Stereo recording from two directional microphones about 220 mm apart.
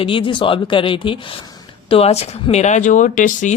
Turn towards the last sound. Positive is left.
turn(degrees=35)  # may be behind; listen again after turning